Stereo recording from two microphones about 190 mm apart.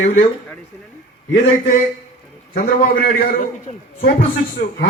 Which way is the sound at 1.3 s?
50° left (ahead or behind).